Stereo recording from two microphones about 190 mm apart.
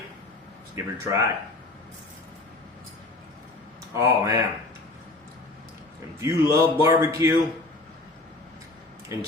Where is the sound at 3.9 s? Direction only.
15° right (ahead or behind).